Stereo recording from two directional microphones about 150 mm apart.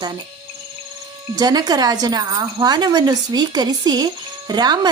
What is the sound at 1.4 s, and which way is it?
Speech, 25° right (ahead or behind).